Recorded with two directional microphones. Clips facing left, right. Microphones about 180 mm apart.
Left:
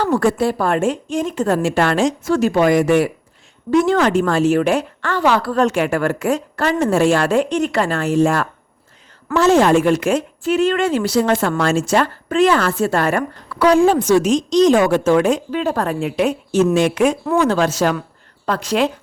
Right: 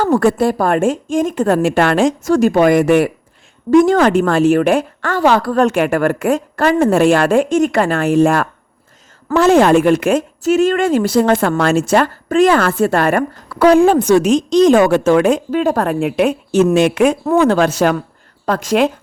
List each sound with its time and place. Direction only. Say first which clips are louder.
0.0 s a woman's voice: right 3 dB; 50° right (ahead or behind)
3.7 s a woman's voice: right 5 dB; 45° right (ahead or behind)
13.5 s a woman's voice: right 4 dB; 45° right (ahead or behind)
13.7 s a woman's voice: right 3 dB; 60° right (ahead or behind)